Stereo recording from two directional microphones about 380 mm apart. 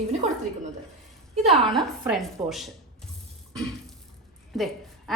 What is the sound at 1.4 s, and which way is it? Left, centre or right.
Speech, centre.